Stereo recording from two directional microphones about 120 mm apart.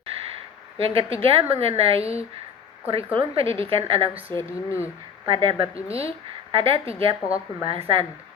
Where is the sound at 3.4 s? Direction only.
20° left (ahead or behind).